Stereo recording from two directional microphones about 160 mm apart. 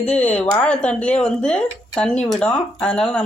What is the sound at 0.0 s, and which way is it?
Speech, 10° left (ahead or behind).